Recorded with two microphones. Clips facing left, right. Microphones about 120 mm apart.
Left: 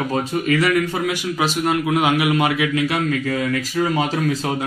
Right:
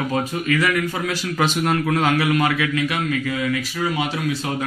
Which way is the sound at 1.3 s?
5° left (ahead or behind).